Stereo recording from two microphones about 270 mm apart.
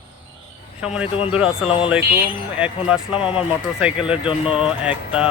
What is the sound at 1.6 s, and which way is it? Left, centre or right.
Speech, left.